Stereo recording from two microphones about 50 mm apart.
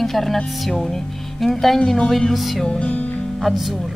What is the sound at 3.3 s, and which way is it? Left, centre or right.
Music, centre.